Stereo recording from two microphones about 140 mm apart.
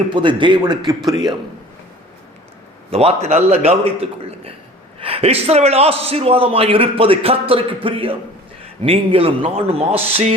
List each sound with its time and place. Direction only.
0.1 s speech: 35° right (ahead or behind)
2.9 s a man's voice: 45° right (ahead or behind)
4.9 s a man's voice: 45° right (ahead or behind)